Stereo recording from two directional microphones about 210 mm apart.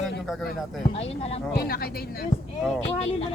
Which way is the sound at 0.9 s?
30° left (ahead or behind).